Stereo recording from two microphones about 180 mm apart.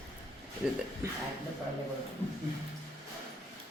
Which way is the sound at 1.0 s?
15° right (ahead or behind).